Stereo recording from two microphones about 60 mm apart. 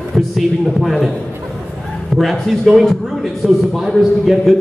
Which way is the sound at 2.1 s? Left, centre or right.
Centre.